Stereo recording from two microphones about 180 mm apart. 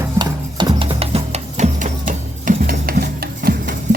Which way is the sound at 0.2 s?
25° right (ahead or behind).